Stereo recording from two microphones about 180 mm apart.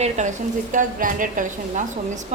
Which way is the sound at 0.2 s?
40° right (ahead or behind).